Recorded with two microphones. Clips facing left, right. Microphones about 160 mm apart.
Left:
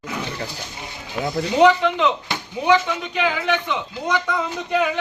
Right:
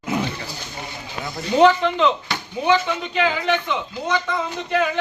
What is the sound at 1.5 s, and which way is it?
Speech, 10° left (ahead or behind).